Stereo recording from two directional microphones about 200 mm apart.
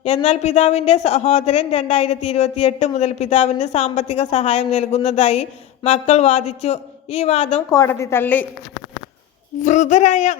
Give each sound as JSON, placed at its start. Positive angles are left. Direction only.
{"t": 0.0, "sound": "a man's voice", "side_deg": 35}
{"t": 7.7, "sound": "a woman's voice", "side_deg": 15}
{"t": 9.6, "sound": "a man's voice", "side_deg": 35}